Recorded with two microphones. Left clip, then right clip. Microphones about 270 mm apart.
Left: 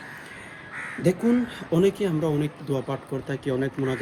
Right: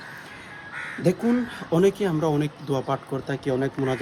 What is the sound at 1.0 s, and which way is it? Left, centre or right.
Speech, centre.